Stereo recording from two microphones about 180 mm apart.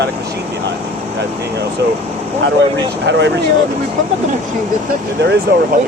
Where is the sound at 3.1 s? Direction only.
75° right (ahead or behind).